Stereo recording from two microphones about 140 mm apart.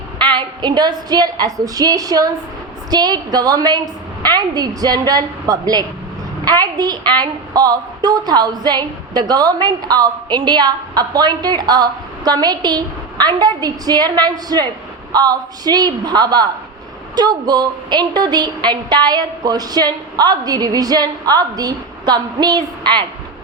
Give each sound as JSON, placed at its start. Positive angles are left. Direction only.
{"t": 0.2, "sound": "a woman's voice", "side_deg": -35}